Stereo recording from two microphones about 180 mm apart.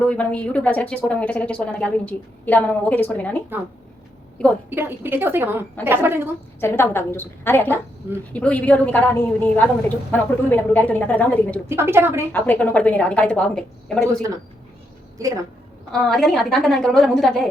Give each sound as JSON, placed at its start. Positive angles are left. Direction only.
{"t": 0.0, "sound": "speech", "side_deg": 5}
{"t": 4.7, "sound": "a woman's voice", "side_deg": -10}
{"t": 6.6, "sound": "speech", "side_deg": 15}
{"t": 11.6, "sound": "a woman's voice", "side_deg": -15}
{"t": 12.3, "sound": "speech", "side_deg": 10}
{"t": 15.2, "sound": "a woman's voice", "side_deg": -15}
{"t": 15.9, "sound": "a woman's voice", "side_deg": 0}